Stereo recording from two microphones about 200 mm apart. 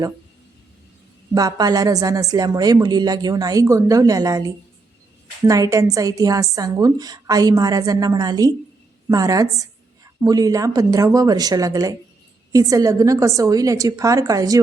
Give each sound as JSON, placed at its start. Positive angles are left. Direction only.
{"t": 1.3, "sound": "a woman's voice", "side_deg": -20}